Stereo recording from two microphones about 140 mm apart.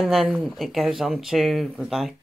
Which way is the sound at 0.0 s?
Centre (ahead or behind).